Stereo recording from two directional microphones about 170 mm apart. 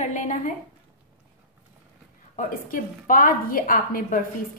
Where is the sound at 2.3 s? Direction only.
50° left (ahead or behind).